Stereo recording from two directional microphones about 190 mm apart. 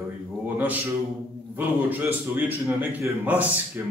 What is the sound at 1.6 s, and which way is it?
A man's voice, 10° right (ahead or behind).